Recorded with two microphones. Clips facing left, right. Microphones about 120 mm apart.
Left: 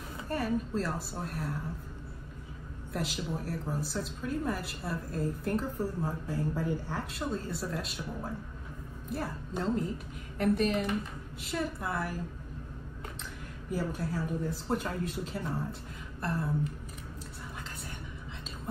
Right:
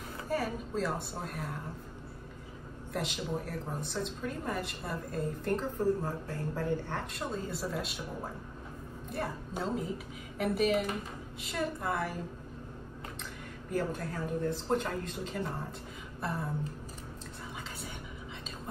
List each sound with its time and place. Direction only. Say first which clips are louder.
0.3 s a woman's voice: left 2 dB; centre (ahead or behind)
2.9 s a woman's voice: even; centre (ahead or behind)
13.7 s a woman's voice: even; 5° left (ahead or behind)
16.2 s a sound: left 2 dB; centre (ahead or behind)